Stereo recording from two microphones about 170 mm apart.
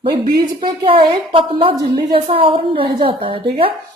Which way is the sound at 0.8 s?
30° right (ahead or behind).